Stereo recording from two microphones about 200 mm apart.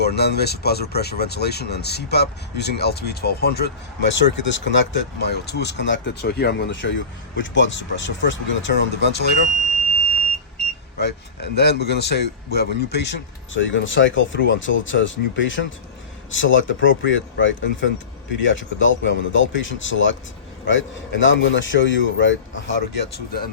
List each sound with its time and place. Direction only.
0.0 s speech: 55° left (ahead or behind)
11.0 s speech: 55° left (ahead or behind)